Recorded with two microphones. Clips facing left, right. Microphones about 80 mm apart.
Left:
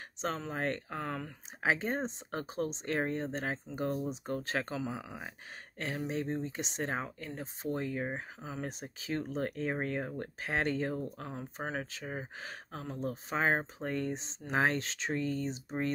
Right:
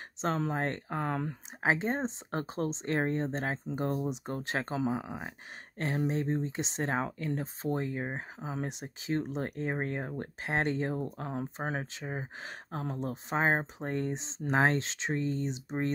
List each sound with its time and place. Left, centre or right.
0.2 s speech: right
7.6 s speech: right